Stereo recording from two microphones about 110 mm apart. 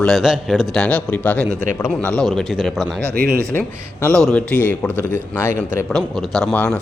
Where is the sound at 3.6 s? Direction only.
15° left (ahead or behind).